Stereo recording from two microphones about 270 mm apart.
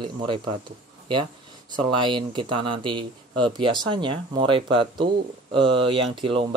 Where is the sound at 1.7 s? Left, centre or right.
Centre.